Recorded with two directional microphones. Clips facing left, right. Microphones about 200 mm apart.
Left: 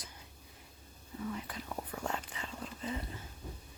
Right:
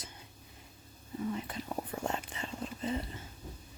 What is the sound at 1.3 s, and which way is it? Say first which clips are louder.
Whispering: right 4 dB; 25° right (ahead or behind).